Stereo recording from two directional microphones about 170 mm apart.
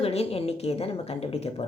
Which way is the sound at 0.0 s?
35° left (ahead or behind).